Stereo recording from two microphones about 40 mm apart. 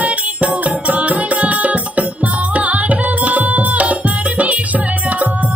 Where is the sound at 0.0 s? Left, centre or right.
Right.